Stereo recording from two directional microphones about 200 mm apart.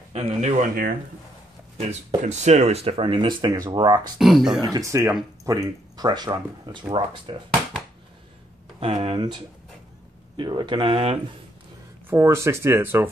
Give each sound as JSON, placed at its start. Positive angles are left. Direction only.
{"t": 0.1, "sound": "speech", "side_deg": -30}
{"t": 4.2, "sound": "speech", "side_deg": 0}
{"t": 4.6, "sound": "speech", "side_deg": -15}
{"t": 8.7, "sound": "speech", "side_deg": -30}
{"t": 12.1, "sound": "speech", "side_deg": -15}